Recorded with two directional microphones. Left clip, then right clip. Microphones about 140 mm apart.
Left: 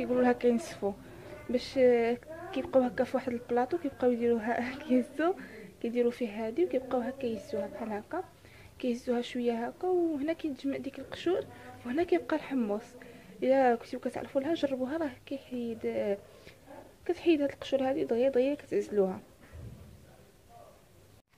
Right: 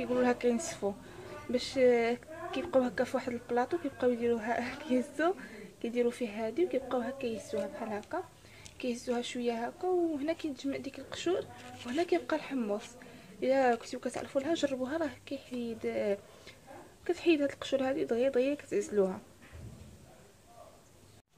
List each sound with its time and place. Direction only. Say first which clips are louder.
0.0 s a woman's voice: left 2 dB; 5° left (ahead or behind)